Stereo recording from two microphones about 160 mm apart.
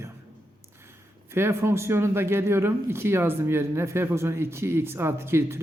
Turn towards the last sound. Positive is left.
turn(degrees=-15)  # may be behind; listen again after turning